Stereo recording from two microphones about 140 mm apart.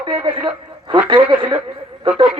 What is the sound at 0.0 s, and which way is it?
Speech, 35° right (ahead or behind).